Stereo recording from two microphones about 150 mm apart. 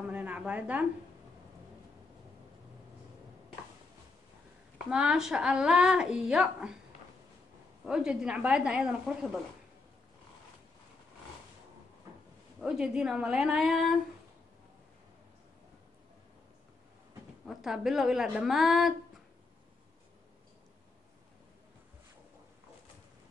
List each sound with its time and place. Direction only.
0.1 s a sound: 10° right (ahead or behind)
4.8 s speech: 5° right (ahead or behind)
7.8 s speech: 5° right (ahead or behind)
12.5 s speech: 5° right (ahead or behind)
17.5 s speech: centre (ahead or behind)